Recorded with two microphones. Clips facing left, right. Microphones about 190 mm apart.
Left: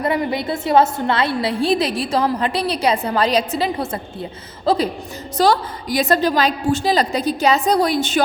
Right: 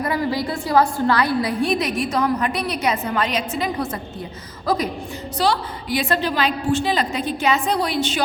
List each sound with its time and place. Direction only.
0.0 s a woman's voice: 25° left (ahead or behind)
5.4 s a woman's voice: 40° left (ahead or behind)